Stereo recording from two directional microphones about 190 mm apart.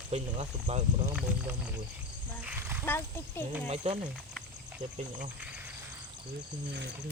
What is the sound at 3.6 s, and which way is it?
Speech, 35° right (ahead or behind).